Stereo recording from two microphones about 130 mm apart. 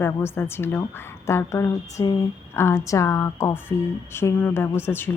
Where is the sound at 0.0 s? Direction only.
20° left (ahead or behind).